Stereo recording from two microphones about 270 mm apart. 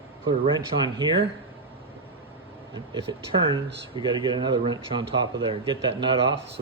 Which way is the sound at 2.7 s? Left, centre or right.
Centre.